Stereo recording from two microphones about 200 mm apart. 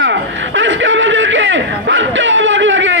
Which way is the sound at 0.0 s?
70° right (ahead or behind).